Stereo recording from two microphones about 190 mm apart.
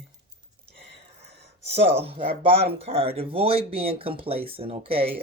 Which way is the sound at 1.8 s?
30° right (ahead or behind).